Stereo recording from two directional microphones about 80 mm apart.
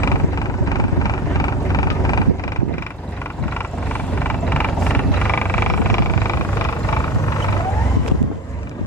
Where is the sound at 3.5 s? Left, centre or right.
Left.